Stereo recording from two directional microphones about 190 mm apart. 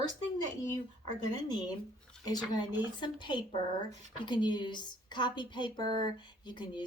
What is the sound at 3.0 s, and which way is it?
A woman's voice, 25° left (ahead or behind).